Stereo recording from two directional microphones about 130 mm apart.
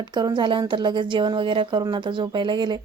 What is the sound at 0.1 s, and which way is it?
A woman's voice, 35° right (ahead or behind).